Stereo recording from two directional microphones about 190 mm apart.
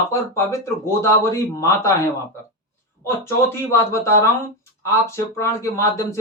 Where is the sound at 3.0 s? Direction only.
15° left (ahead or behind).